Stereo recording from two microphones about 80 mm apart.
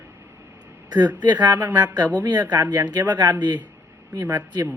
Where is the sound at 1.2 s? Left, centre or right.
Right.